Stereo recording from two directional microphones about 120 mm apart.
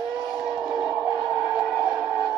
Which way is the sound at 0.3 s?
5° right (ahead or behind).